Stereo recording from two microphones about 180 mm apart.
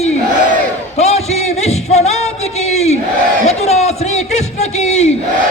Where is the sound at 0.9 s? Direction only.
35° left (ahead or behind).